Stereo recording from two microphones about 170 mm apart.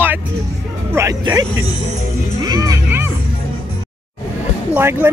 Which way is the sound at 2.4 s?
20° right (ahead or behind).